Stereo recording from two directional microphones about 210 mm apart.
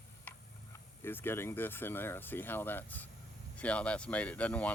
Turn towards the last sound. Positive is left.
turn(degrees=5)  # may be behind; listen again after turning